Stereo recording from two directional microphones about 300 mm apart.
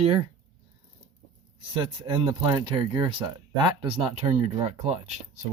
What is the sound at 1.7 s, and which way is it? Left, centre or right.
Speech, centre.